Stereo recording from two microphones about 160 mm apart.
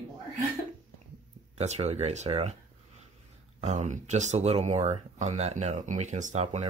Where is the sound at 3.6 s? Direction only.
45° right (ahead or behind).